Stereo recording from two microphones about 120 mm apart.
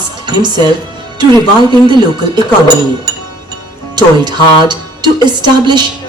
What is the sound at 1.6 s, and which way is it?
Speech, 40° right (ahead or behind).